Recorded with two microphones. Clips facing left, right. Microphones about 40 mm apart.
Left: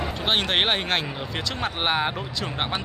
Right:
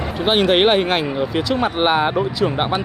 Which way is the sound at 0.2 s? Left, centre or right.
Centre.